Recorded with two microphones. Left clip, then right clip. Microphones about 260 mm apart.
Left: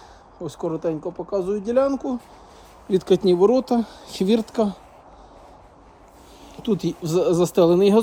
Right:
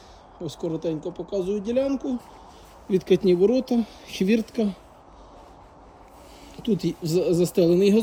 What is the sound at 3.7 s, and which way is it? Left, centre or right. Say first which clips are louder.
Speech: left 3 dB; centre.